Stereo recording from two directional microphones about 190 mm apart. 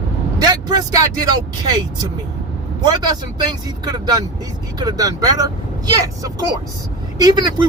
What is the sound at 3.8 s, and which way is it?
Speech, 20° right (ahead or behind).